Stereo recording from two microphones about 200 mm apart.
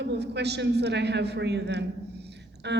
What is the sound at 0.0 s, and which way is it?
A woman's voice, 60° right (ahead or behind).